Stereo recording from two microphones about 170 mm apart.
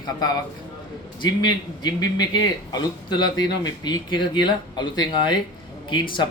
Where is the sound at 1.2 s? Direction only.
25° left (ahead or behind).